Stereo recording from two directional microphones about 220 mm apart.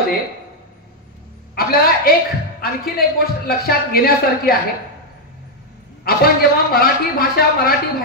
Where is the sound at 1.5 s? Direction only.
45° left (ahead or behind).